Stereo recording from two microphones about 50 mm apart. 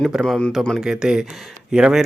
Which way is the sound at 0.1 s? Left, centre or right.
Centre.